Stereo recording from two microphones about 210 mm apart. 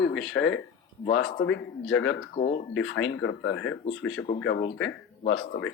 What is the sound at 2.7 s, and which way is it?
Speech, 65° left (ahead or behind).